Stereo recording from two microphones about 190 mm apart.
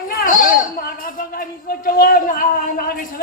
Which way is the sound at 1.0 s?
50° left (ahead or behind).